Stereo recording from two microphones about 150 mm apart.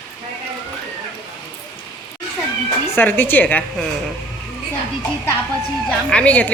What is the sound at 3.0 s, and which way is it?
Speech, 15° left (ahead or behind).